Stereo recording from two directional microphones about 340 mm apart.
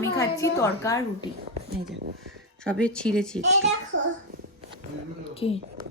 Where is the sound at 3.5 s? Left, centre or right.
Right.